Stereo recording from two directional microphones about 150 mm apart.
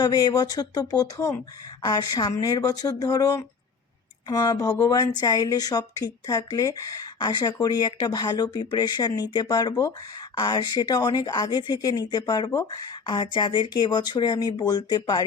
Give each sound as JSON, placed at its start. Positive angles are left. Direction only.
{"t": 0.0, "sound": "speech", "side_deg": 25}